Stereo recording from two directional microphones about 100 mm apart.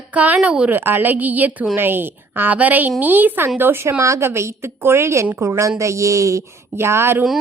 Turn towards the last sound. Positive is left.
turn(degrees=-25)  # may be behind; listen again after turning